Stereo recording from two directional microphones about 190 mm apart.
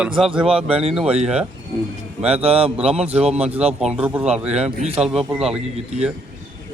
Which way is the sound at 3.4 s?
35° right (ahead or behind).